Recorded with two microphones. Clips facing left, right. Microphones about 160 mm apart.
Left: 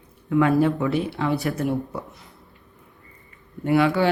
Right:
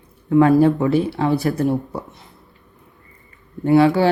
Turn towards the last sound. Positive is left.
turn(degrees=-30)  # may be behind; listen again after turning